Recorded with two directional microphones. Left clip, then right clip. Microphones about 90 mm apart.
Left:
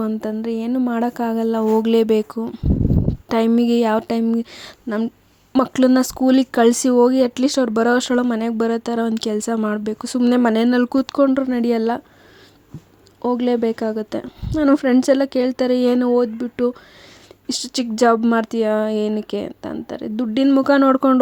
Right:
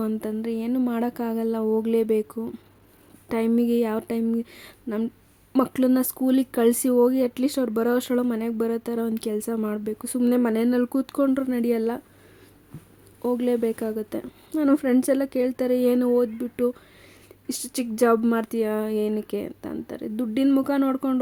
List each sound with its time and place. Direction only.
0.0 s speech: 25° left (ahead or behind); by 2.4 s 45° left (ahead or behind)
2.4 s speech: 25° left (ahead or behind)
3.2 s speech: 45° left (ahead or behind)
13.2 s speech: 30° left (ahead or behind)
20.7 s speech: 60° left (ahead or behind)